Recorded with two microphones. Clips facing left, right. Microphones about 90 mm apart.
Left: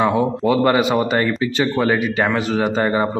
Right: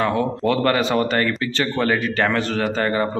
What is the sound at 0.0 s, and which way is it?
A man's voice, 15° left (ahead or behind).